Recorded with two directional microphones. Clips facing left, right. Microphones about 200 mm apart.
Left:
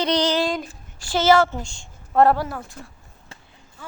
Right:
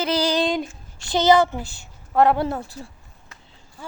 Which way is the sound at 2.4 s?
25° right (ahead or behind).